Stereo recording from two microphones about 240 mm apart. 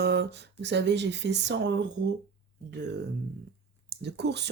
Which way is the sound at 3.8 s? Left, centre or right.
Right.